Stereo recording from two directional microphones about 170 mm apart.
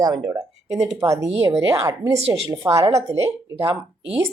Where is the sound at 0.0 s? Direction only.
20° right (ahead or behind).